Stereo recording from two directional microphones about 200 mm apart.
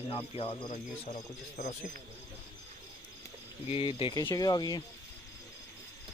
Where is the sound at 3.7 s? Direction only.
30° left (ahead or behind).